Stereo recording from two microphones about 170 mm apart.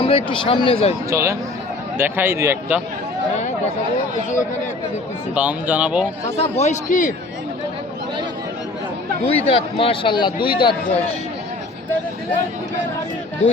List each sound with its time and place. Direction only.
0.0 s speech: 35° left (ahead or behind)
1.1 s a man's voice: 15° right (ahead or behind)
5.3 s a man's voice: 5° right (ahead or behind)
6.3 s speech: 35° left (ahead or behind)
9.2 s speech: 35° left (ahead or behind)